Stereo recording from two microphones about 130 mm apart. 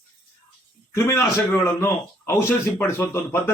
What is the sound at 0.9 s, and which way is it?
A man's voice, 25° left (ahead or behind).